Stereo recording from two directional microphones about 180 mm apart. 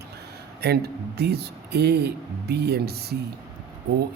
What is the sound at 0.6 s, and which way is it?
Speech, 60° right (ahead or behind).